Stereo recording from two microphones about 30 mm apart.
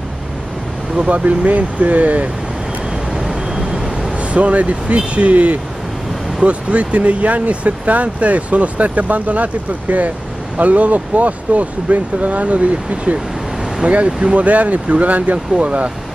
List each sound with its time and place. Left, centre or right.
0.9 s speech: right
3.5 s vehicle: right
4.2 s speech: right
15.3 s speech: right